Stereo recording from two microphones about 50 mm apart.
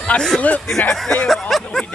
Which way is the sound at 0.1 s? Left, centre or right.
Left.